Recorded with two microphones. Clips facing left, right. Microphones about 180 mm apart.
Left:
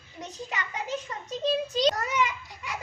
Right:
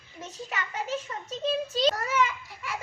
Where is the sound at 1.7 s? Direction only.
15° left (ahead or behind).